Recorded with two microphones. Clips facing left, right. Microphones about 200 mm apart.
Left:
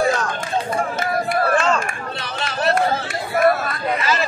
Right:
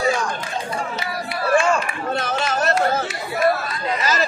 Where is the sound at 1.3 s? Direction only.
55° left (ahead or behind).